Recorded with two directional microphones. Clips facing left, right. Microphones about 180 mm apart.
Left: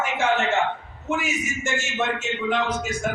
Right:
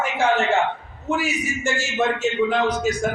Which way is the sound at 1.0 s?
35° right (ahead or behind).